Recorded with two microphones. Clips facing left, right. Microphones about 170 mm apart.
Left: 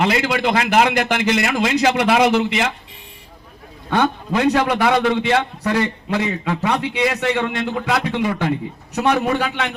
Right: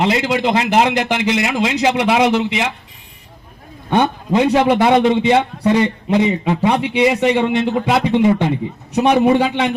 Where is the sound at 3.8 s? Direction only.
20° right (ahead or behind).